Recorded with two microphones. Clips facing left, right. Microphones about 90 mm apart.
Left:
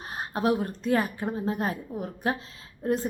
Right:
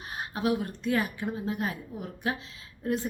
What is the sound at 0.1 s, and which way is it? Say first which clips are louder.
A woman's voice: left 3 dB; 40° left (ahead or behind).